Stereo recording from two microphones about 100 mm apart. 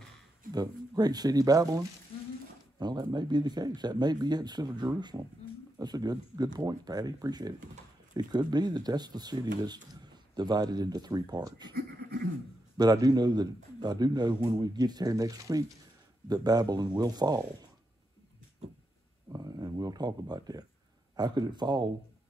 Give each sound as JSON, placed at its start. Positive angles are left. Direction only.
{"t": 0.5, "sound": "speech", "side_deg": -45}
{"t": 12.7, "sound": "speech", "side_deg": -40}
{"t": 19.3, "sound": "a sound", "side_deg": -40}
{"t": 21.2, "sound": "speech", "side_deg": -45}